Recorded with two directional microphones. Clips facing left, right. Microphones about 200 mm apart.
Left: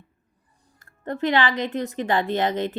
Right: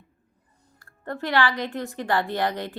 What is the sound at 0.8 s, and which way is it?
Speech, 20° left (ahead or behind).